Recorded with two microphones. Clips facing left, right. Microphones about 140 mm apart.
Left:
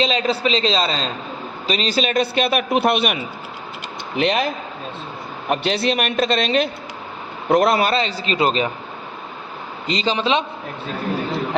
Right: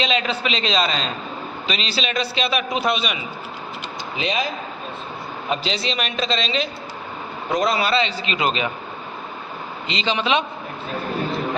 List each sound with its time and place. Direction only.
0.0 s a man's voice: 35° left (ahead or behind)
9.8 s a man's voice: 40° left (ahead or behind)